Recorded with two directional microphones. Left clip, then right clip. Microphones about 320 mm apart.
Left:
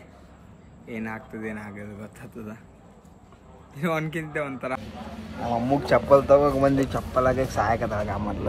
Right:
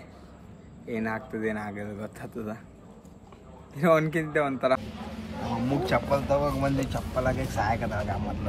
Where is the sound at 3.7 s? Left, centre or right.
Centre.